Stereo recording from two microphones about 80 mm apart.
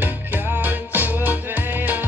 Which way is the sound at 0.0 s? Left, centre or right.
Right.